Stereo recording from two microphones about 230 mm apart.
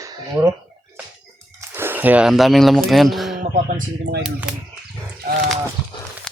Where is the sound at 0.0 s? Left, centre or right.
Centre.